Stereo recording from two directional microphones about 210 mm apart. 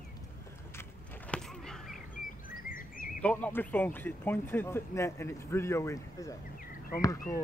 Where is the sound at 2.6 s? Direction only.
40° left (ahead or behind).